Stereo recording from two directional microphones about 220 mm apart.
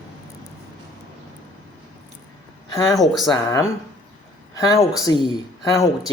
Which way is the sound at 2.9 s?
Centre (ahead or behind).